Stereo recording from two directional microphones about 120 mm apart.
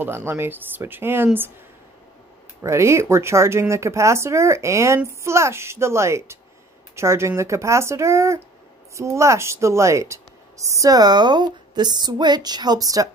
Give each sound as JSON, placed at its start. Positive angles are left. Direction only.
{"t": 0.0, "sound": "speech", "side_deg": -20}
{"t": 2.6, "sound": "speech", "side_deg": -25}